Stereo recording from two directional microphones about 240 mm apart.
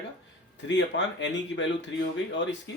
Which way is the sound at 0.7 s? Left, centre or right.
Left.